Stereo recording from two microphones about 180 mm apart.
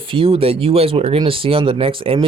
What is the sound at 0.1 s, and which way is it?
A man's voice, 30° right (ahead or behind).